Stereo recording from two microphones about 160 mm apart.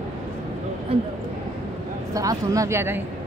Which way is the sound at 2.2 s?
20° right (ahead or behind).